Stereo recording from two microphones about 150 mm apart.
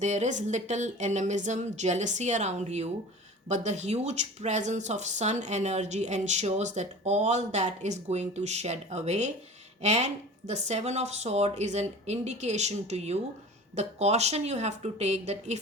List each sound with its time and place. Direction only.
0.0 s speech: 50° right (ahead or behind)